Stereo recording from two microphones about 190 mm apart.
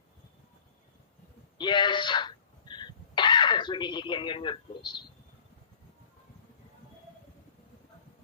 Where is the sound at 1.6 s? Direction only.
25° left (ahead or behind).